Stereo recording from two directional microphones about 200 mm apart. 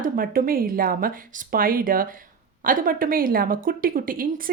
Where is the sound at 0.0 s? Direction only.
45° right (ahead or behind).